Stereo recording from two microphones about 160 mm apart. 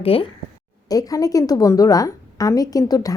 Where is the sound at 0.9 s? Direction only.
20° left (ahead or behind).